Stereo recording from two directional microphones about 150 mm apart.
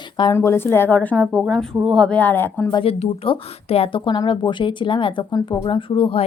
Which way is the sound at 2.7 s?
40° left (ahead or behind).